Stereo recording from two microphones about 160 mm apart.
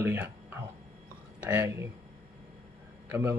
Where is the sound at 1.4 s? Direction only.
15° right (ahead or behind).